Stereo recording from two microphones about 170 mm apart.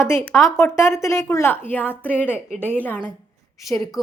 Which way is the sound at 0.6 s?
15° left (ahead or behind).